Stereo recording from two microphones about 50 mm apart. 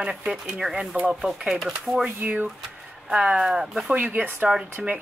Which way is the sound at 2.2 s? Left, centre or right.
Right.